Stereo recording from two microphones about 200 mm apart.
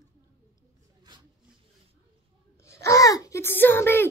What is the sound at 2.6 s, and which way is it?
Speech, 15° left (ahead or behind).